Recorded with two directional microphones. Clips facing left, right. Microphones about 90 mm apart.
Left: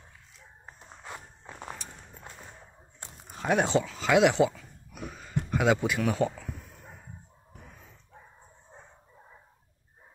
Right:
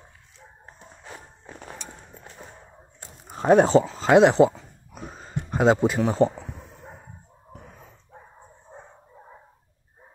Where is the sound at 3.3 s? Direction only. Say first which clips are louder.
Right 9 dB; 35° right (ahead or behind).